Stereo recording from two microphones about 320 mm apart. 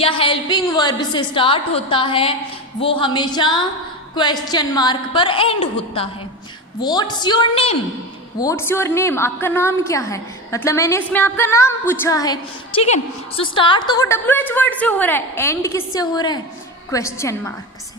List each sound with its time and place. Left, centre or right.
0.0 s a woman's voice: centre